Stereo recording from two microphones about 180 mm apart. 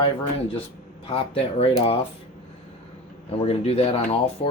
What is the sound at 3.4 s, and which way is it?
Speech, 35° left (ahead or behind).